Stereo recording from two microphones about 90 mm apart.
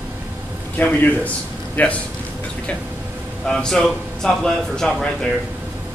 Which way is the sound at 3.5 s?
5° left (ahead or behind).